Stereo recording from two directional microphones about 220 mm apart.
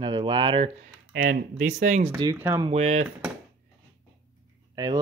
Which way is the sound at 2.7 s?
30° right (ahead or behind).